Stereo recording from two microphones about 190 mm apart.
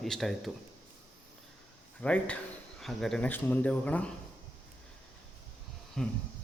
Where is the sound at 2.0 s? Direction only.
5° left (ahead or behind).